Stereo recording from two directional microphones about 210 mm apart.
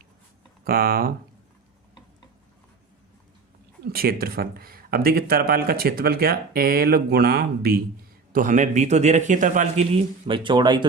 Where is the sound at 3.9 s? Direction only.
45° right (ahead or behind).